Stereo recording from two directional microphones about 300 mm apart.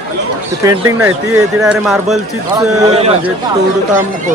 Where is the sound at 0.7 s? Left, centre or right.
Centre.